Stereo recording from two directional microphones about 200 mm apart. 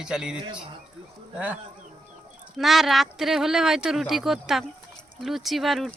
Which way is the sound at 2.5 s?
Centre (ahead or behind).